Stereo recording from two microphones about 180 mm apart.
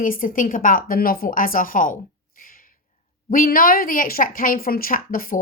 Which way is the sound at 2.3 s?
50° left (ahead or behind).